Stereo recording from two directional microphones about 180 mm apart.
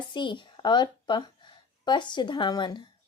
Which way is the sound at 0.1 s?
25° left (ahead or behind).